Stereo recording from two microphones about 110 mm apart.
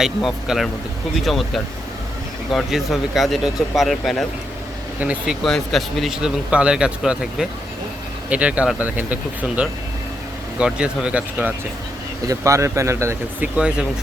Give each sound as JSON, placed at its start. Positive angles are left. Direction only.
{"t": 0.0, "sound": "speech", "side_deg": -5}
{"t": 4.9, "sound": "speech", "side_deg": -10}
{"t": 12.3, "sound": "speech", "side_deg": -30}
{"t": 13.6, "sound": "speech", "side_deg": -10}